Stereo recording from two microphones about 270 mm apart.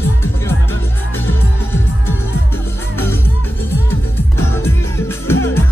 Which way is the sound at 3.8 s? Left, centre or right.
Centre.